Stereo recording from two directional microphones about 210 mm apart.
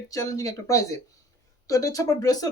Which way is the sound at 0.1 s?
15° left (ahead or behind).